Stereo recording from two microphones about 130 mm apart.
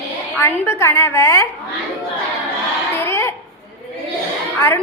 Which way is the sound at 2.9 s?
20° left (ahead or behind).